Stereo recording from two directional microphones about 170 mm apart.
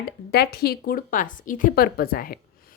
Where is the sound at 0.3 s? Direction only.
70° left (ahead or behind).